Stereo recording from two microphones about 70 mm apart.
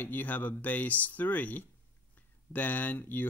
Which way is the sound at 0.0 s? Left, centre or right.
Left.